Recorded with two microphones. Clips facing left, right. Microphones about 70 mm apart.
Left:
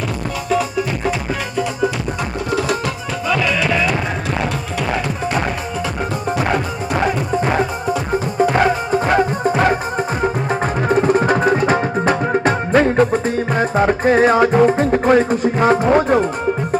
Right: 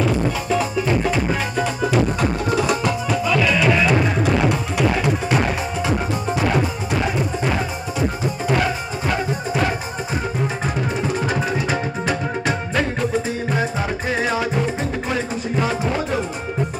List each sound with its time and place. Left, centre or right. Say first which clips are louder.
3.2 s music: left 1 dB; centre
8.5 s music: left 6 dB; left
10.8 s music: left 10 dB; left